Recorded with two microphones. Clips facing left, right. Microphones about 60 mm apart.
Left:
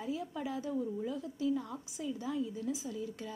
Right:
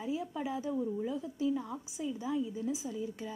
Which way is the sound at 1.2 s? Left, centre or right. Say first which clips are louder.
Right 1 dB; right.